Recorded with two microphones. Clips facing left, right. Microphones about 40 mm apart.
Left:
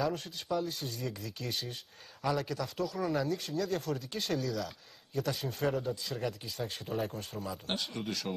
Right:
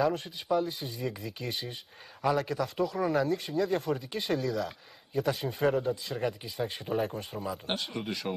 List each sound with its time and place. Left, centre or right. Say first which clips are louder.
0.0 s a man's voice: right 5 dB; centre